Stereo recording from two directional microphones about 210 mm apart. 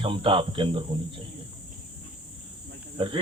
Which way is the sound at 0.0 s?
25° right (ahead or behind).